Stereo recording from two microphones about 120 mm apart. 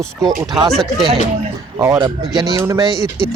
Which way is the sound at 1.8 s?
35° right (ahead or behind).